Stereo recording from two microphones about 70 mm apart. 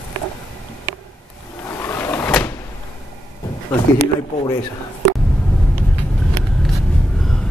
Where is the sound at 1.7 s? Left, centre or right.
Left.